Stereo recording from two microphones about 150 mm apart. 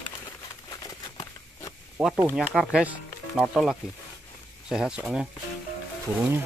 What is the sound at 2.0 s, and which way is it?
Speech, 5° right (ahead or behind).